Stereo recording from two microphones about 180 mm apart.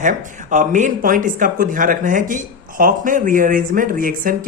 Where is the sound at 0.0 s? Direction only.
45° right (ahead or behind).